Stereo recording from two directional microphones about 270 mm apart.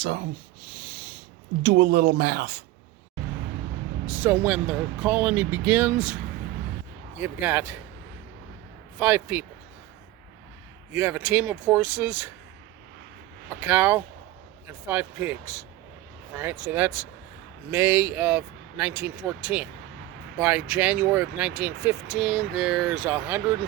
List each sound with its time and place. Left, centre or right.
1.6 s speech: right
4.0 s speech: centre
7.2 s speech: centre
9.0 s speech: centre
10.9 s speech: centre
13.5 s speech: centre